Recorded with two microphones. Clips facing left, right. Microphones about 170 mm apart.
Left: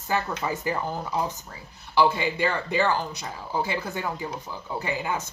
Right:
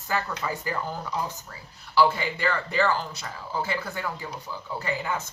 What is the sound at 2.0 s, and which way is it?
Speech, 20° left (ahead or behind).